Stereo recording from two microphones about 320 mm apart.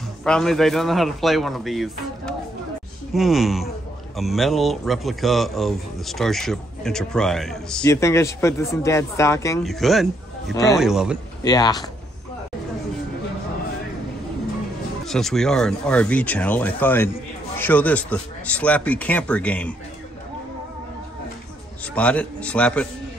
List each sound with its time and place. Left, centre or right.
0.2 s a man's voice: centre
10.8 s a man's voice: centre
11.4 s speech: centre
15.0 s a man's voice: centre
21.9 s a man's voice: centre